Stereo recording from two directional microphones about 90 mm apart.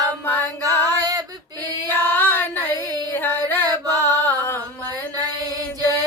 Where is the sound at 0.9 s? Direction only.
40° right (ahead or behind).